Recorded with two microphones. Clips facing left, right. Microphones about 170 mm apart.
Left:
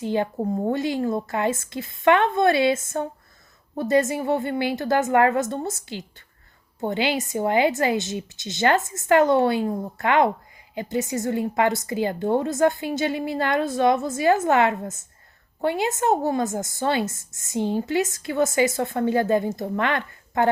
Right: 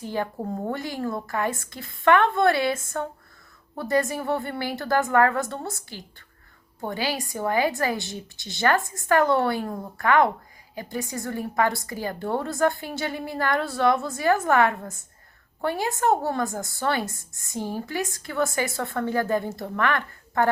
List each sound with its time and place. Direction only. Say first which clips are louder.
0.0 s speech: left 5 dB; 20° left (ahead or behind)